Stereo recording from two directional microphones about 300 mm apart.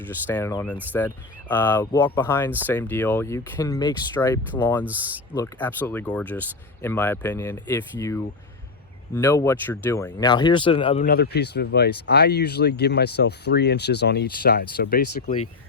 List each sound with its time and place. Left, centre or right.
0.3 s speech: centre; by 15.1 s left